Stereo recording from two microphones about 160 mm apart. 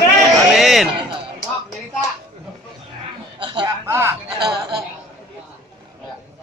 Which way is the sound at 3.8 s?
15° right (ahead or behind).